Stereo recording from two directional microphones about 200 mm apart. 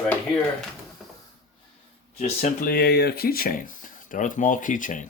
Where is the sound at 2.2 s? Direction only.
35° left (ahead or behind).